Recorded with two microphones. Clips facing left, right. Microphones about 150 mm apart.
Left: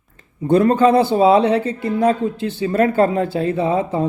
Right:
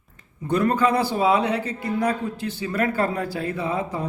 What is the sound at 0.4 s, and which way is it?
A man's voice, 25° left (ahead or behind).